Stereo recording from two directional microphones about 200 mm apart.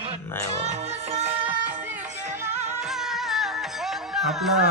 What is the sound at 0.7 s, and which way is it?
Music, 35° right (ahead or behind).